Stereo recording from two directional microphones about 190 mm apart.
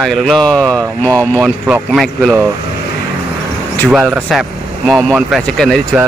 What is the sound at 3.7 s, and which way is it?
Speech, centre (ahead or behind).